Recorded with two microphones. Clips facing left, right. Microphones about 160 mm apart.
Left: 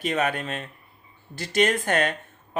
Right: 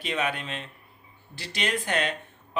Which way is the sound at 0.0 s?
45° left (ahead or behind).